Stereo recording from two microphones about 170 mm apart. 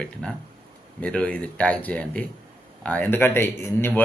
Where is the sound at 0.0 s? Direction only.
5° left (ahead or behind).